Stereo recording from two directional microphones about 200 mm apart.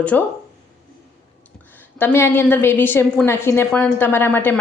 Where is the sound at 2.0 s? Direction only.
10° left (ahead or behind).